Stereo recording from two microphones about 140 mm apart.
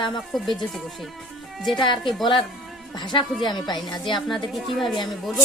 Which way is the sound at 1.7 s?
35° left (ahead or behind).